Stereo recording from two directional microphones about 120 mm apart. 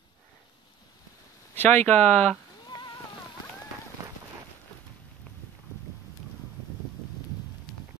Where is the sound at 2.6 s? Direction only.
35° left (ahead or behind).